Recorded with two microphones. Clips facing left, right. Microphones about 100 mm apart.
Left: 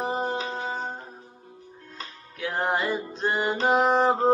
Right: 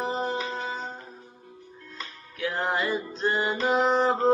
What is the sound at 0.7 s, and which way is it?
Music, 45° left (ahead or behind).